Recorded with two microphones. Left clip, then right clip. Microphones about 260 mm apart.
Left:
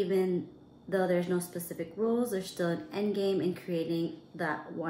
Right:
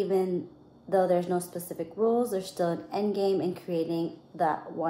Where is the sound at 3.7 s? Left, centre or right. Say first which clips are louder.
Right 4 dB; left.